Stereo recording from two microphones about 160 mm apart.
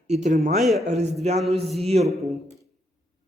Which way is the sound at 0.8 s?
45° right (ahead or behind).